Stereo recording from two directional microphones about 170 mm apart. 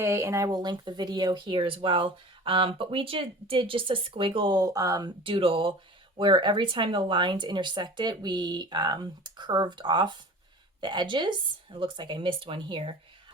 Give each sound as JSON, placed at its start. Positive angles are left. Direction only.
{"t": 0.0, "sound": "speech", "side_deg": -15}